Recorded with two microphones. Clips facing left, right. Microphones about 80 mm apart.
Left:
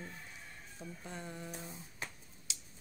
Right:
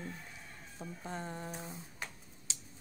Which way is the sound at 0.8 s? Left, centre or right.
Right.